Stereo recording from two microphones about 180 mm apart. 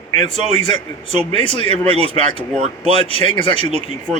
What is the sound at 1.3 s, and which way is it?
Speech, 30° left (ahead or behind).